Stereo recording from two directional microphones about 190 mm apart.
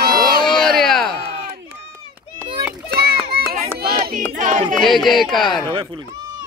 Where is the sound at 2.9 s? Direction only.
55° right (ahead or behind).